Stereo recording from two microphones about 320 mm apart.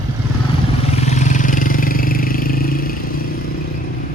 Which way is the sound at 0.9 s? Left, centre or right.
Left.